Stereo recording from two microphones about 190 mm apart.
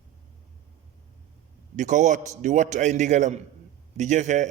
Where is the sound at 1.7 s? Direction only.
40° right (ahead or behind).